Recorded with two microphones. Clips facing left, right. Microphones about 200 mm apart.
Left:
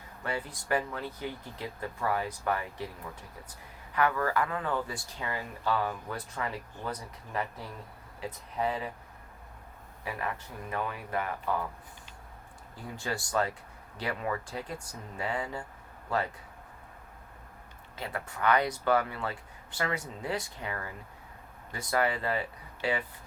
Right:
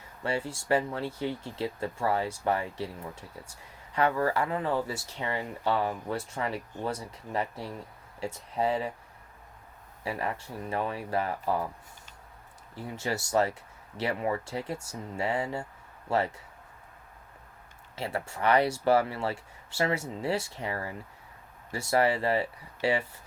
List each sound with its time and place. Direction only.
0.2 s speech: 25° right (ahead or behind)
10.0 s speech: 30° right (ahead or behind)
13.0 s speech: 25° right (ahead or behind)
17.9 s speech: 25° right (ahead or behind)